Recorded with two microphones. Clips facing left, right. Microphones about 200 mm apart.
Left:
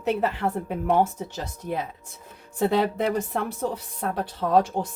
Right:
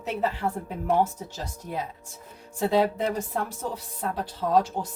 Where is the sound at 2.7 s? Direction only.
60° left (ahead or behind).